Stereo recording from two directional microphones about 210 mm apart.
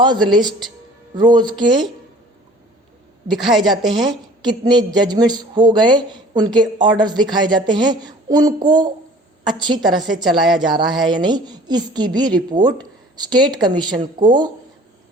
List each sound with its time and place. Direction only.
0.3 s a woman's voice: 20° right (ahead or behind)
3.4 s a woman's voice: centre (ahead or behind)
4.0 s a woman's voice: 20° right (ahead or behind)